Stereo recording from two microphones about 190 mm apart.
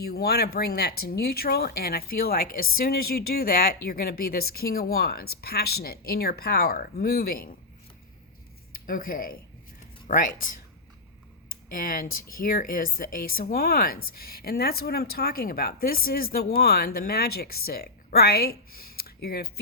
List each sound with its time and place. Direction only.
0.0 s speech: 55° left (ahead or behind)
8.9 s speech: 50° left (ahead or behind)
11.7 s speech: 45° left (ahead or behind)
18.9 s a sound: 55° left (ahead or behind)